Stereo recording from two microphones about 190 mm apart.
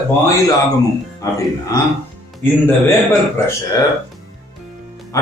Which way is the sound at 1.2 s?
15° left (ahead or behind).